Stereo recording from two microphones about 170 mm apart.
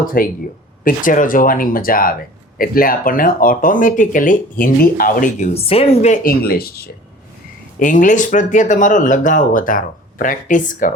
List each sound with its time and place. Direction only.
0.0 s speech: 55° left (ahead or behind)
5.5 s speech: 35° left (ahead or behind)
6.2 s speech: 65° left (ahead or behind)
7.8 s speech: 50° left (ahead or behind)